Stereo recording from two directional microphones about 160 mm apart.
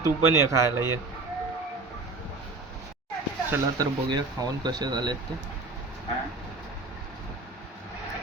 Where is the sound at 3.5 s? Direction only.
25° right (ahead or behind).